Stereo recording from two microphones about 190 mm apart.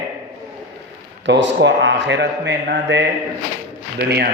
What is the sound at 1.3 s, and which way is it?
A man's voice, 70° right (ahead or behind).